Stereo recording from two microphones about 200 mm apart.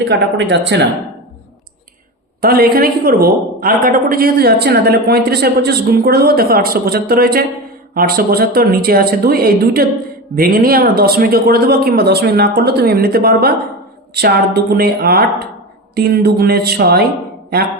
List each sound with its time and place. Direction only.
0.0 s speech: 60° right (ahead or behind)
2.4 s speech: 50° right (ahead or behind)